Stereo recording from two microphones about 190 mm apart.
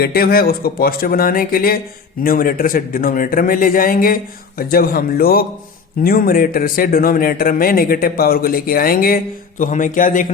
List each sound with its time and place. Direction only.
0.0 s speech: 55° left (ahead or behind)